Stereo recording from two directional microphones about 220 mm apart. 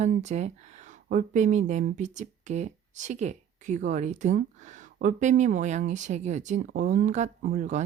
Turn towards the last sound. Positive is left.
turn(degrees=-35)  # may be behind; listen again after turning